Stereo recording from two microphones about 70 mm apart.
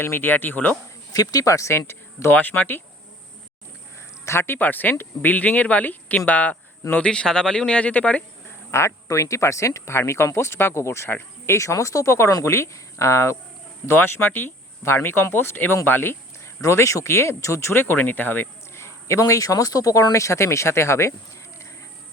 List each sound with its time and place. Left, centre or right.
0.0 s speech: left
1.1 s speech: left
2.3 s speech: left
4.3 s speech: left; by 8.2 s centre
8.7 s speech: left
16.6 s speech: left
19.3 s speech: left